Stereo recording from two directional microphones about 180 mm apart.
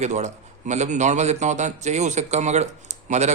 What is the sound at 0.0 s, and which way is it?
A man's voice, 40° right (ahead or behind).